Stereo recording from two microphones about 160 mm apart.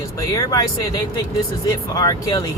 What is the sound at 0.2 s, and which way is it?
Speech, 25° left (ahead or behind).